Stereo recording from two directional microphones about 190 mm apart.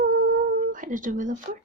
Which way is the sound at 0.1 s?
45° right (ahead or behind).